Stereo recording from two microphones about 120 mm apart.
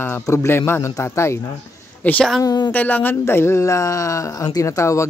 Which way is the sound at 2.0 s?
15° left (ahead or behind).